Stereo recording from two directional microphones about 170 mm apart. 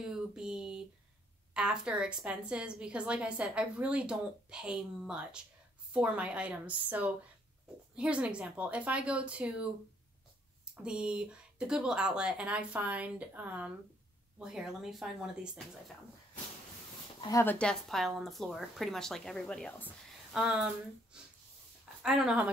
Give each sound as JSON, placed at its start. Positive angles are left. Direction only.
{"t": 0.4, "sound": "a sound", "side_deg": -5}
{"t": 1.5, "sound": "a woman's voice", "side_deg": -5}
{"t": 17.2, "sound": "speech", "side_deg": 20}
{"t": 17.6, "sound": "a woman's voice", "side_deg": 5}